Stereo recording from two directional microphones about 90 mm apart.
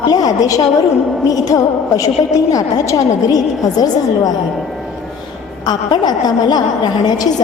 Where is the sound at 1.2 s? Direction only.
45° left (ahead or behind).